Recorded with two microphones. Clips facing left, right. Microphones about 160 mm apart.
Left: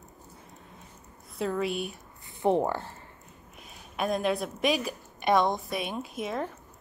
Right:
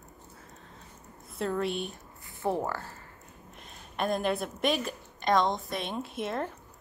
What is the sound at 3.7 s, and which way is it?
A woman's voice, centre (ahead or behind).